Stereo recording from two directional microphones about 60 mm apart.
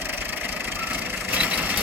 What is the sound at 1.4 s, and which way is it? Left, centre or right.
Vehicle, right.